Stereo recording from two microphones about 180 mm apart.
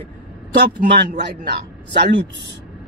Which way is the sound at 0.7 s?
45° right (ahead or behind).